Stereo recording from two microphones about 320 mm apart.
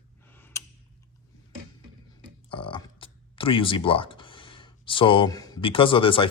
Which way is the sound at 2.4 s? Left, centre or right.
Centre.